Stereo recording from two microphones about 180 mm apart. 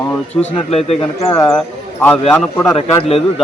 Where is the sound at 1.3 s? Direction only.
5° left (ahead or behind).